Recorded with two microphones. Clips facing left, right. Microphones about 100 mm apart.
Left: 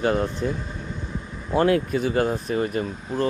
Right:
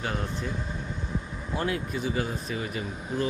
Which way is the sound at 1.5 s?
65° left (ahead or behind).